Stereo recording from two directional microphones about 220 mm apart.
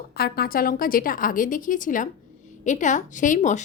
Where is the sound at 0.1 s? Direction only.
45° left (ahead or behind).